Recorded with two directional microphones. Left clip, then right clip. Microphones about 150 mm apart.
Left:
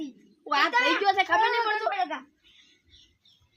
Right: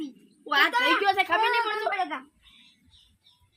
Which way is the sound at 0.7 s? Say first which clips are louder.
Even; 25° left (ahead or behind).